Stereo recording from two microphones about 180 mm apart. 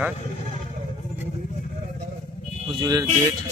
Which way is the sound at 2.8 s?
20° right (ahead or behind).